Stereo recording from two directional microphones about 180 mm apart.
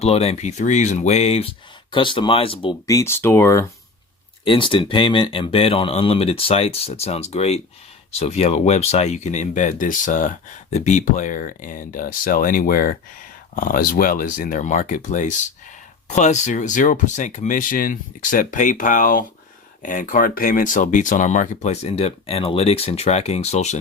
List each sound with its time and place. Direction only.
0.0 s speech: 35° left (ahead or behind); by 3.7 s 15° left (ahead or behind)
4.4 s speech: 30° left (ahead or behind)